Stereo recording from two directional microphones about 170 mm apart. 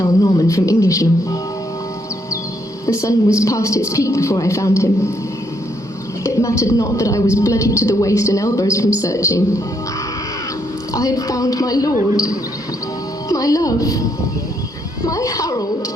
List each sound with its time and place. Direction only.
0.0 s a woman's voice: 20° left (ahead or behind)
2.8 s a woman's voice: 20° left (ahead or behind)
6.2 s a woman's voice: 20° left (ahead or behind)
10.9 s a woman's voice: 20° left (ahead or behind)
15.0 s a woman's voice: 20° left (ahead or behind)